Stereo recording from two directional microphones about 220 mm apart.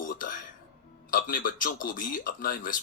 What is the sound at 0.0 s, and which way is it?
Music, 40° left (ahead or behind).